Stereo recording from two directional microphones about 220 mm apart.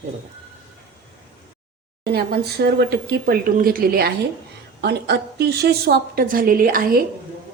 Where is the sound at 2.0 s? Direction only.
45° right (ahead or behind).